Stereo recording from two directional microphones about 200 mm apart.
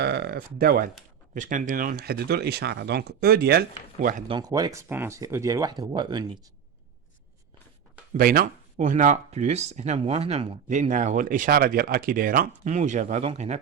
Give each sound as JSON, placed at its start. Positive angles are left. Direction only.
{"t": 0.0, "sound": "speech", "side_deg": -55}
{"t": 4.3, "sound": "speech", "side_deg": -20}
{"t": 8.1, "sound": "speech", "side_deg": -45}